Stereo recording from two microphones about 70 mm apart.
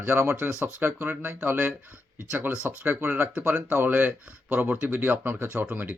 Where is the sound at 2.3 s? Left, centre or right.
Right.